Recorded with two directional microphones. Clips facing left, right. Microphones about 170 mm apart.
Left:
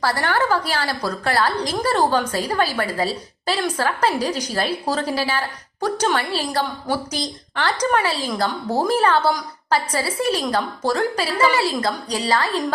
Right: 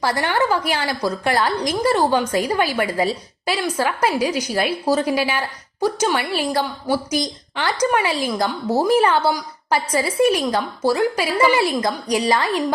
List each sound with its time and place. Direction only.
0.0 s a woman's voice: 15° right (ahead or behind)